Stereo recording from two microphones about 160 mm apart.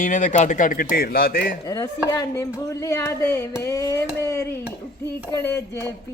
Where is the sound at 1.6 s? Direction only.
20° left (ahead or behind).